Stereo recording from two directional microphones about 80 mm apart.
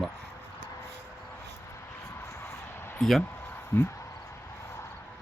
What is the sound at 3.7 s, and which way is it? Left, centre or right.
Speech, left.